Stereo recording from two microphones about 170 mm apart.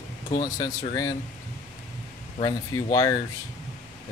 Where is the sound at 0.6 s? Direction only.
20° left (ahead or behind).